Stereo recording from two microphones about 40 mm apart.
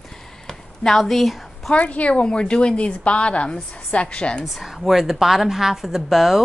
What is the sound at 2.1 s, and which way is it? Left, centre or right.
A woman's voice, left.